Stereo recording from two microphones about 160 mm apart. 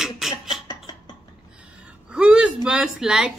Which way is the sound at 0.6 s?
25° left (ahead or behind).